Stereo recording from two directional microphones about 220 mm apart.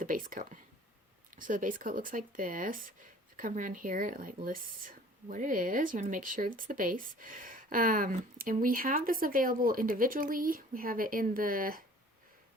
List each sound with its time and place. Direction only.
0.0 s speech: 40° right (ahead or behind)